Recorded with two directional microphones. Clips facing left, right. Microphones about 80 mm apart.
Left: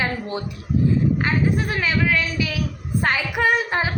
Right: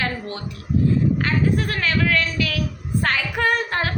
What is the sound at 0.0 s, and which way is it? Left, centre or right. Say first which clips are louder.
A woman's voice: left 2 dB; centre.